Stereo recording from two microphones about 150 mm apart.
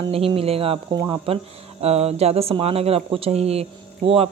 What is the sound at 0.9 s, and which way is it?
A woman's voice, 30° right (ahead or behind).